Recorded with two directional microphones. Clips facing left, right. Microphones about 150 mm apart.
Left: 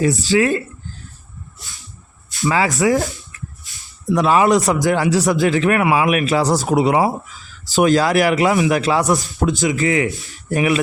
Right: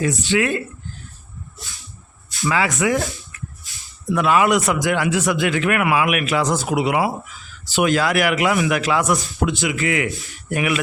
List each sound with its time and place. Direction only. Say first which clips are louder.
0.0 s speech: left 4 dB; 35° left (ahead or behind)
2.5 s speech: left 3 dB; 40° left (ahead or behind)
2.9 s speech: left 3 dB; 20° left (ahead or behind)
3.7 s a sound: left 3 dB; centre (ahead or behind)
4.1 s speech: left 3 dB; 35° left (ahead or behind)